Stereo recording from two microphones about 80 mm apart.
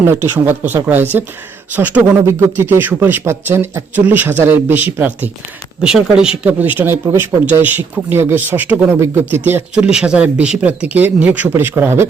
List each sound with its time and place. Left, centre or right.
0.0 s a man's voice: right
5.8 s speech: centre
6.6 s speech: right
9.7 s speech: centre; by 12.0 s right